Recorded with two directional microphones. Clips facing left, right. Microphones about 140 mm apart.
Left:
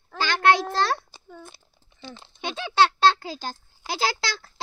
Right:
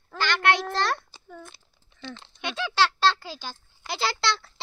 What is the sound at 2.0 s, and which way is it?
Speech, 10° left (ahead or behind).